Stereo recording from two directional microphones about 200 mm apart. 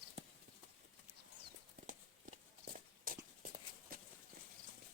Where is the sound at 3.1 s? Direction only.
45° right (ahead or behind).